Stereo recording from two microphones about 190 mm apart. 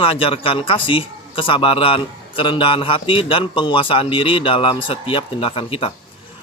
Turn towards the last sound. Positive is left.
turn(degrees=30)  # may be behind; listen again after turning